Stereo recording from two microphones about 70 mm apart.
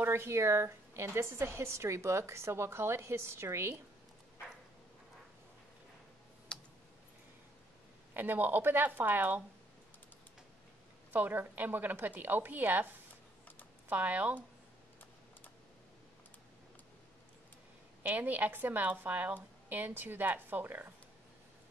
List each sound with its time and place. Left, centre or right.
0.0 s a woman's voice: right
6.5 s clicking: centre
8.1 s a woman's voice: right
11.1 s a woman's voice: right
18.0 s a woman's voice: right